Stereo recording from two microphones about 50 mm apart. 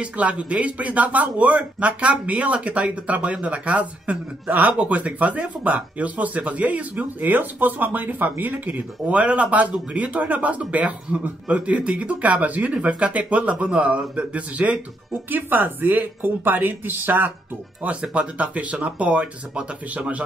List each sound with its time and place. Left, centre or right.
0.0 s speech: right
15.2 s speech: right
18.1 s speech: right